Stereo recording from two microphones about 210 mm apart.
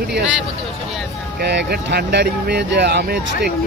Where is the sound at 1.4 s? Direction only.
55° right (ahead or behind).